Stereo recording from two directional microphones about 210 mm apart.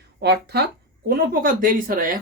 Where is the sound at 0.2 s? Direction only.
50° right (ahead or behind).